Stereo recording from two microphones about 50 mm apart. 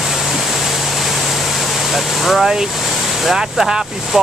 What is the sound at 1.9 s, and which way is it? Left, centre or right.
Speech, centre.